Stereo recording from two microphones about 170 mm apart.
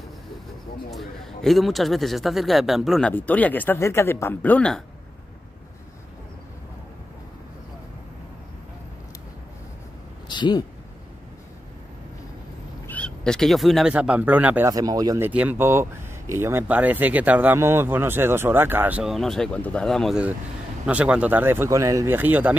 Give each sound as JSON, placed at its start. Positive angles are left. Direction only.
{"t": 0.8, "sound": "a man's voice", "side_deg": 0}
{"t": 10.2, "sound": "a sound", "side_deg": 25}
{"t": 12.8, "sound": "speech", "side_deg": 5}
{"t": 14.7, "sound": "speech", "side_deg": -20}